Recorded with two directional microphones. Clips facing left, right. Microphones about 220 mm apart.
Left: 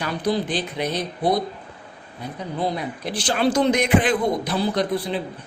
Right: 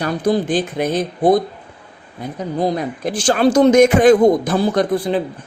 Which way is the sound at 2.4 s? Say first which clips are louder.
Right 6 dB; 45° right (ahead or behind).